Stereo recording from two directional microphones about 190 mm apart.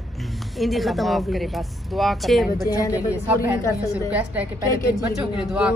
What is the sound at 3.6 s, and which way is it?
Speech, 15° left (ahead or behind).